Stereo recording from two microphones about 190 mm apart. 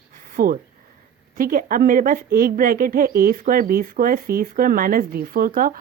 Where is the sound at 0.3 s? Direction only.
45° right (ahead or behind).